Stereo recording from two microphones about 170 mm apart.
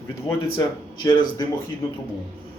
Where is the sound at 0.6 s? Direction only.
20° left (ahead or behind).